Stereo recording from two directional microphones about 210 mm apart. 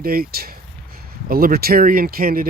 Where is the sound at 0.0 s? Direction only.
45° right (ahead or behind).